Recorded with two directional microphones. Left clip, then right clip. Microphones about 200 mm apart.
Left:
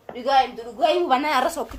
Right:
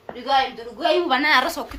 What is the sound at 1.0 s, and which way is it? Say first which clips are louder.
Speech: right 2 dB; 65° left (ahead or behind).